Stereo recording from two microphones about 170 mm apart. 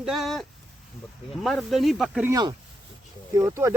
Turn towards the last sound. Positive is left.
turn(degrees=-15)  # may be behind; listen again after turning